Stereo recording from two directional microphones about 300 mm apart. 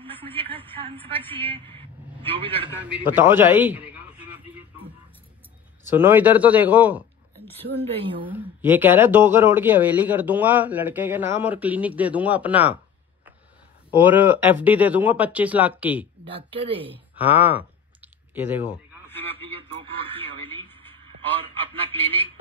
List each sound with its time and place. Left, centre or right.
0.0 s a woman's voice: centre
2.2 s a woman's voice: centre
2.8 s a man's voice: centre
5.9 s a man's voice: centre
7.6 s speech: centre
8.3 s a man's voice: centre
13.9 s a man's voice: centre
16.3 s a woman's voice: centre
17.1 s clicking: centre
19.1 s a man's voice: centre
19.5 s a woman's voice: centre
20.6 s a sound: centre